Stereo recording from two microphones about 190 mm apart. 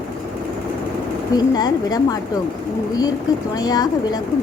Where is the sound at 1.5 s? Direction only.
20° left (ahead or behind).